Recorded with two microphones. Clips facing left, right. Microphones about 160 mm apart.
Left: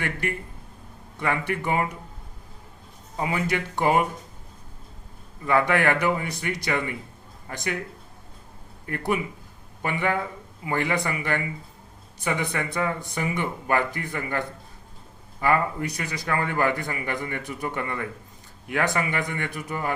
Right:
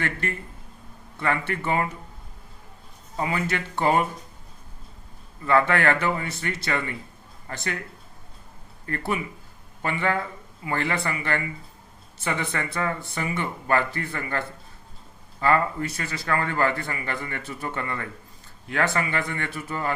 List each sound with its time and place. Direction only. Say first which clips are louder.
0.0 s a man's voice: even; 15° left (ahead or behind)
3.2 s a man's voice: left 1 dB; 15° left (ahead or behind)
5.5 s a man's voice: right 1 dB; 15° left (ahead or behind)
8.9 s a man's voice: left 2 dB; 15° left (ahead or behind)